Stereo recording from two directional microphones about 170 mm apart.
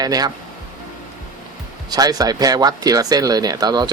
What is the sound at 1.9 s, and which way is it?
Speech, 20° right (ahead or behind).